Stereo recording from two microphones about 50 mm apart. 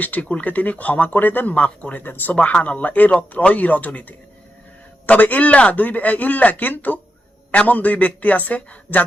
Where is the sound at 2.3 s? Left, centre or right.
Left.